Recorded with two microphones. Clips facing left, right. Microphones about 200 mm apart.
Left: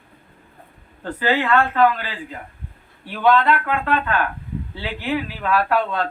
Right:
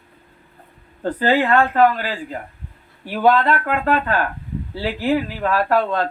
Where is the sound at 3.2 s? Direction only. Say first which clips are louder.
Right 1 dB; 40° right (ahead or behind).